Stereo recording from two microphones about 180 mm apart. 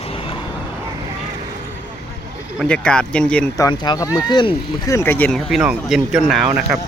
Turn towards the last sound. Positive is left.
turn(degrees=0)  # may be behind; listen again after turning